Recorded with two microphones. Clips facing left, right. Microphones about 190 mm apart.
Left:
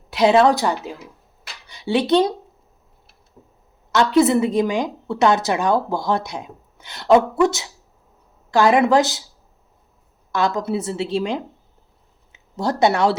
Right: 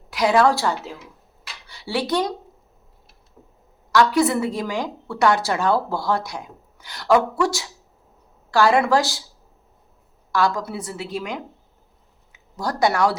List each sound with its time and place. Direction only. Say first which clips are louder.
0.1 s a woman's voice: left 3 dB; 25° left (ahead or behind)
3.9 s a woman's voice: left 3 dB; 25° left (ahead or behind)
10.3 s a woman's voice: left 2 dB; 20° left (ahead or behind)